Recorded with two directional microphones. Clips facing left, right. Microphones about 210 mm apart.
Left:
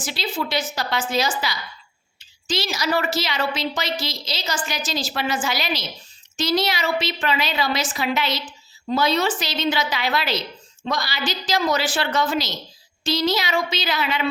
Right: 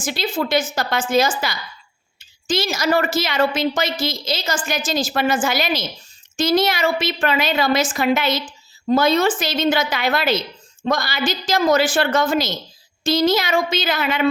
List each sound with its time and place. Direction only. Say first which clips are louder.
0.0 s a woman's voice: right 4 dB; 50° right (ahead or behind)